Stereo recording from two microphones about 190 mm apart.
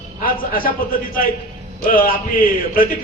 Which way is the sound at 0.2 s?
50° left (ahead or behind).